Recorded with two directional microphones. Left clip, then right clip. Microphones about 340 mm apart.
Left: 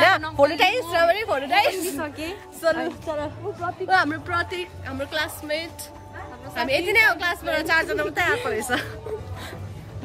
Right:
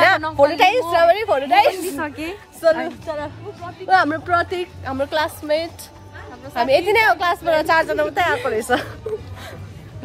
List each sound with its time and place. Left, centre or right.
0.5 s a woman's voice: centre
2.0 s a woman's voice: centre
2.6 s a woman's voice: centre